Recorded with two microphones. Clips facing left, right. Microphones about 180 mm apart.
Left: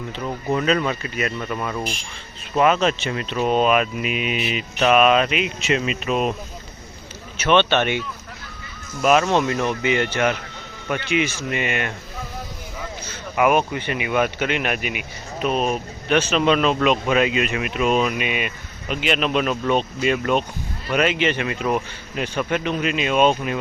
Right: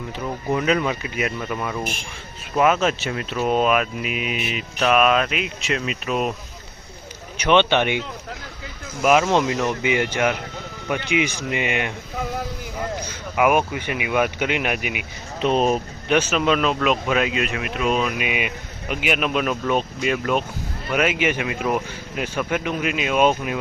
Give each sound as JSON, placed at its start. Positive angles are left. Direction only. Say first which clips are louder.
{"t": 0.5, "sound": "speech", "louder": "even", "side_deg": -10}
{"t": 7.3, "sound": "speech", "louder": "even", "side_deg": -15}
{"t": 13.0, "sound": "speech", "louder": "left 1 dB", "side_deg": -10}
{"t": 15.4, "sound": "speech", "louder": "right 3 dB", "side_deg": -30}
{"t": 16.0, "sound": "speech", "louder": "left 1 dB", "side_deg": -10}
{"t": 18.3, "sound": "speech", "louder": "even", "side_deg": -15}